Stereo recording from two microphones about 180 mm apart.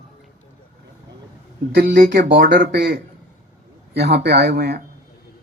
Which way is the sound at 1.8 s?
60° right (ahead or behind).